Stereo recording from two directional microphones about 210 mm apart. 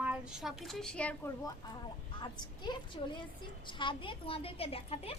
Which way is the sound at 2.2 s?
20° left (ahead or behind).